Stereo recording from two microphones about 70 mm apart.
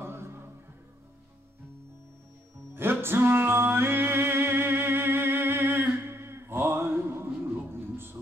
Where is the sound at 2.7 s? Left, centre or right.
Right.